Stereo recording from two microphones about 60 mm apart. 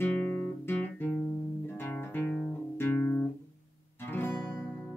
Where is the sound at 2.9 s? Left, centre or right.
Left.